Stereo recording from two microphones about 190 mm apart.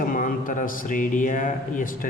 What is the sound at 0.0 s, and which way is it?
A man's voice, 45° left (ahead or behind).